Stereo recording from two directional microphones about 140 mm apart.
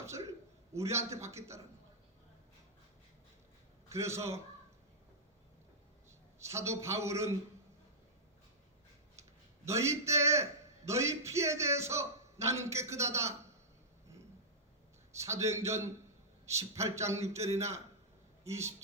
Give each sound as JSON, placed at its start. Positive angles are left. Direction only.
{"t": 0.0, "sound": "a man's voice", "side_deg": -20}
{"t": 3.8, "sound": "a man's voice", "side_deg": -20}
{"t": 6.1, "sound": "a man's voice", "side_deg": -20}
{"t": 9.6, "sound": "a man's voice", "side_deg": -20}
{"t": 15.1, "sound": "a man's voice", "side_deg": -20}